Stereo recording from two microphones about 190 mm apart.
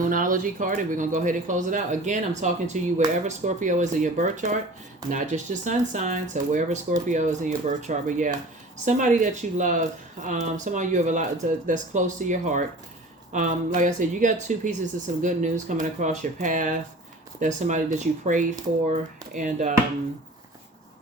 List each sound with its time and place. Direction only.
0.1 s speech: 45° right (ahead or behind)